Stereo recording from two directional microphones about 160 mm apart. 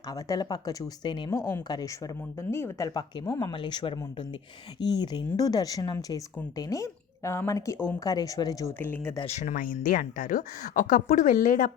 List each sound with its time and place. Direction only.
0.1 s speech: 20° left (ahead or behind)
1.3 s speech: 15° left (ahead or behind)
9.2 s speech: 45° left (ahead or behind)